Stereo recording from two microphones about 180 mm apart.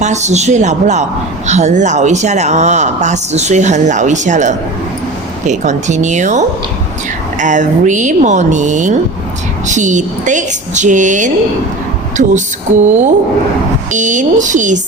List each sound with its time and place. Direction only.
0.0 s a woman's voice: 40° right (ahead or behind)